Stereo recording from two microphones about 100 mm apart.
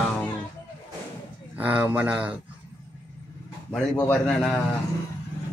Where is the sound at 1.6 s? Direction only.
15° right (ahead or behind).